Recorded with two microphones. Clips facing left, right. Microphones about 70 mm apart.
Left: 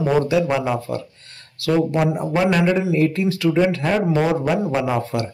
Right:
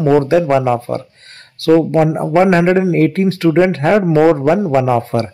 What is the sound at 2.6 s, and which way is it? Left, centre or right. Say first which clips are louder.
Speech: right 6 dB; right.